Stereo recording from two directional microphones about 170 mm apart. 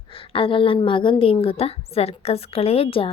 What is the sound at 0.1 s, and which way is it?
A woman's voice, 30° left (ahead or behind).